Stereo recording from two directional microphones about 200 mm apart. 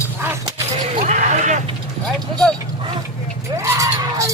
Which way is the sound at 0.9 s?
35° right (ahead or behind).